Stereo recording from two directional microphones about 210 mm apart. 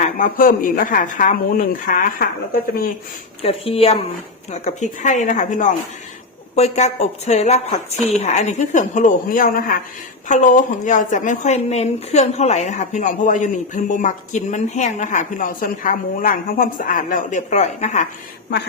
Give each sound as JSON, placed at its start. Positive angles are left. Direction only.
{"t": 0.0, "sound": "a woman's voice", "side_deg": 40}
{"t": 3.4, "sound": "a woman's voice", "side_deg": 25}